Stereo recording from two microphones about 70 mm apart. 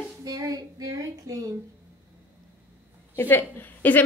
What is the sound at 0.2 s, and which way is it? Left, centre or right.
A woman's voice, right.